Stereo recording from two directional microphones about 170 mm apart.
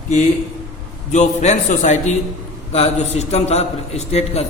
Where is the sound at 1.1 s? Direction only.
40° left (ahead or behind).